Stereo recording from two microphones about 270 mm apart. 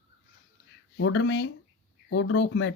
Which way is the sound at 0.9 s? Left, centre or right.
Left.